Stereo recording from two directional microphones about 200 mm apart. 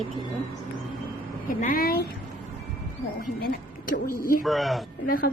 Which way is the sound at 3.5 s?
45° left (ahead or behind).